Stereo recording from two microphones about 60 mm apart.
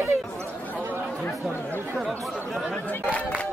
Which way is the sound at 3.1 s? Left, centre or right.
Left.